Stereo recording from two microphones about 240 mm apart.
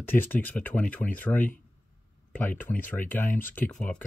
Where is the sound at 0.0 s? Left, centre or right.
Centre.